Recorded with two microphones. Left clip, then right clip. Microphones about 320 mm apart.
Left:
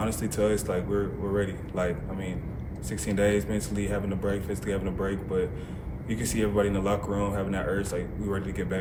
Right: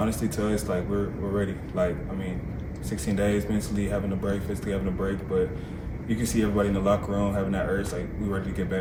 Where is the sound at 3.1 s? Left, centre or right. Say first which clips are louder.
Left 2 dB; centre.